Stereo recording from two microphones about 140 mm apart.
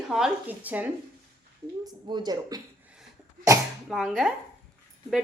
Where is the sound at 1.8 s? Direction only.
30° right (ahead or behind).